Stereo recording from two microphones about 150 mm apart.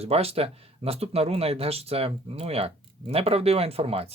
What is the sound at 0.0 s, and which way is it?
Speech, 40° right (ahead or behind).